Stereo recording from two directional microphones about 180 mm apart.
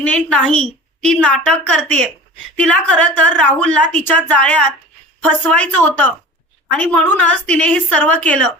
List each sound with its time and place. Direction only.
0.0 s a woman's voice: 5° left (ahead or behind)